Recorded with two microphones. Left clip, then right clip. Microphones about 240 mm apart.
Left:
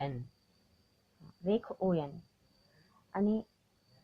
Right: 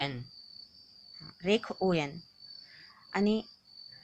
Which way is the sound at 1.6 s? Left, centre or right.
Right.